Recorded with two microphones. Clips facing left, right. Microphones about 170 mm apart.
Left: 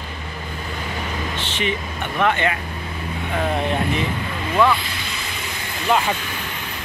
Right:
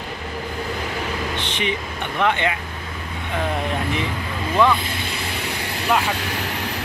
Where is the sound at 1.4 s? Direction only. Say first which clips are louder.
Left 3 dB; 15° right (ahead or behind).